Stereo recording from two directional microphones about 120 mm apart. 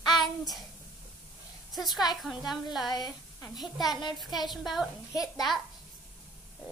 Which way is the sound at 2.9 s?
30° left (ahead or behind).